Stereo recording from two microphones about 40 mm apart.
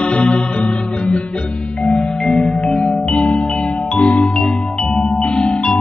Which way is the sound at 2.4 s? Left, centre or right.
Left.